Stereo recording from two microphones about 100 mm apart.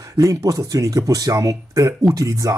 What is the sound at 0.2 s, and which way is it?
Speech, 30° right (ahead or behind).